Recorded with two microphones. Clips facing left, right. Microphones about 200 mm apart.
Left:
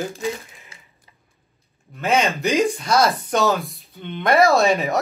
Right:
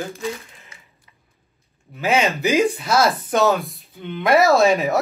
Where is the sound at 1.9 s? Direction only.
Centre (ahead or behind).